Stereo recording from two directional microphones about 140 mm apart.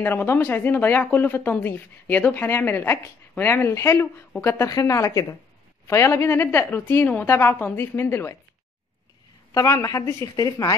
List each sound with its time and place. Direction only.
0.0 s a woman's voice: 15° left (ahead or behind)
9.5 s a woman's voice: 25° left (ahead or behind)